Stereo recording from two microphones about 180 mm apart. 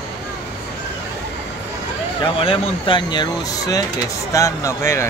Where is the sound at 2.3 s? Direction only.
30° left (ahead or behind).